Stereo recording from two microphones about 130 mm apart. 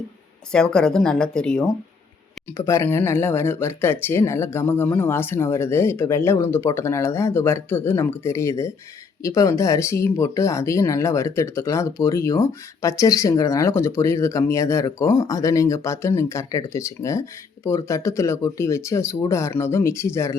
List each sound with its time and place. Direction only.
0.5 s speech: 5° left (ahead or behind)
2.6 s speech: 20° left (ahead or behind)